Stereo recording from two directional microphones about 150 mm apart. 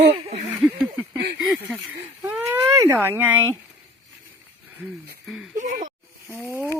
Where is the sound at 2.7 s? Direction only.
15° right (ahead or behind).